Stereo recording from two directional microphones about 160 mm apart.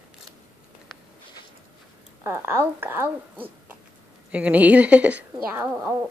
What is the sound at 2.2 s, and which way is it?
Speech, 15° right (ahead or behind).